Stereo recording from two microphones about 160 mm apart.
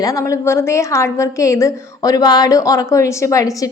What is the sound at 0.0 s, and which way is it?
A woman's voice, 20° left (ahead or behind).